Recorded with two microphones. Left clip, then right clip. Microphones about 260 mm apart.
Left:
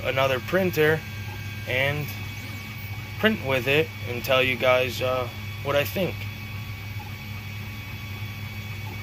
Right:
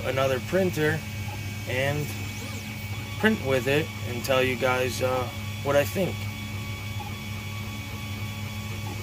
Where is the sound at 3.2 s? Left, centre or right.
Centre.